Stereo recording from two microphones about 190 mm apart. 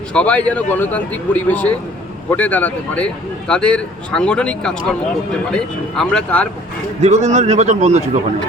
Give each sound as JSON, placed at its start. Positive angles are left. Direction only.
{"t": 0.1, "sound": "a man's voice", "side_deg": 5}
{"t": 7.0, "sound": "speech", "side_deg": -40}